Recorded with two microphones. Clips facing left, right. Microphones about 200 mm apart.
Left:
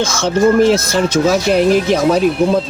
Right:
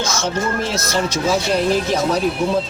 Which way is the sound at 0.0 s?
55° left (ahead or behind).